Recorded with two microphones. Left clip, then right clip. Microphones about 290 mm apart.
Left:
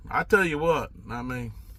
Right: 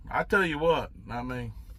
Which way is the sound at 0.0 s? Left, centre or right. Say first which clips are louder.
Left 3 dB; centre.